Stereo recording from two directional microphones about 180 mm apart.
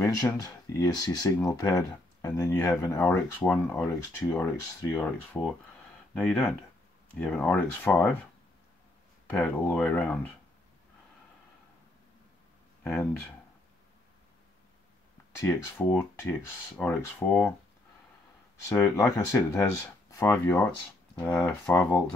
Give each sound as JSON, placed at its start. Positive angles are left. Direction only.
{"t": 0.0, "sound": "speech", "side_deg": 20}
{"t": 9.3, "sound": "speech", "side_deg": 10}
{"t": 12.8, "sound": "speech", "side_deg": 10}
{"t": 15.4, "sound": "speech", "side_deg": 10}
{"t": 18.7, "sound": "speech", "side_deg": 5}